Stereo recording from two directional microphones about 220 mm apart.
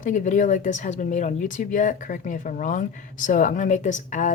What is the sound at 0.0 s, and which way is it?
Speech, 35° left (ahead or behind).